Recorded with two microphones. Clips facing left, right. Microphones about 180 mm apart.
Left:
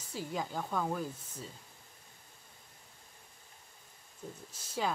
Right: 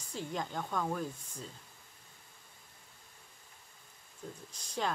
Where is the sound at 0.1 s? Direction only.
5° left (ahead or behind).